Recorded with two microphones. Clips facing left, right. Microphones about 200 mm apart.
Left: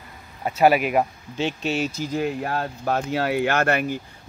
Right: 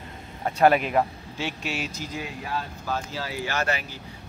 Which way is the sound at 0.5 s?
5° left (ahead or behind).